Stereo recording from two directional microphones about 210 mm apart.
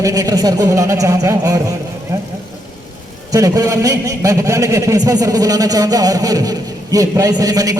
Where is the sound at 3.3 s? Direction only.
15° right (ahead or behind).